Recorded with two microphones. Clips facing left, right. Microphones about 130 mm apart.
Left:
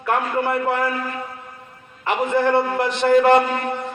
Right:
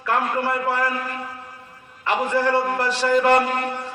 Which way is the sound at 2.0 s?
20° left (ahead or behind).